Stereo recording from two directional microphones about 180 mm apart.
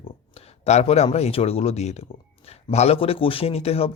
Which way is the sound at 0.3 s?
35° left (ahead or behind).